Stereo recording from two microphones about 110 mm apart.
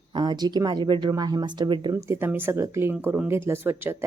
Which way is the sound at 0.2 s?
40° right (ahead or behind).